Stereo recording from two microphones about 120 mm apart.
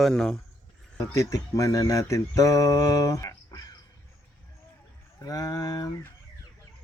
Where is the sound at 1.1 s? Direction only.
25° left (ahead or behind).